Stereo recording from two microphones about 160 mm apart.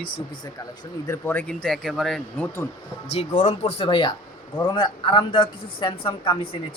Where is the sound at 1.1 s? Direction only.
10° left (ahead or behind).